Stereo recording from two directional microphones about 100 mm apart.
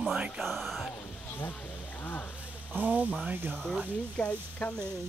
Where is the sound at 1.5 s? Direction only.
15° left (ahead or behind).